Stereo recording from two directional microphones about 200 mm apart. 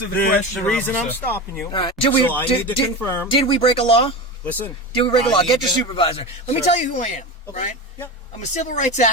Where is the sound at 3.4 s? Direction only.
25° left (ahead or behind).